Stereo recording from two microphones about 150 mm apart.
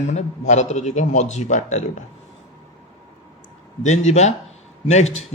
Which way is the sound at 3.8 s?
50° left (ahead or behind).